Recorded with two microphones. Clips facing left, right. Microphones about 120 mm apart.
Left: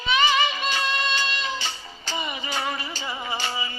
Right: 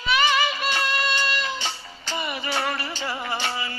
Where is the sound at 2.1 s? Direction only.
65° right (ahead or behind).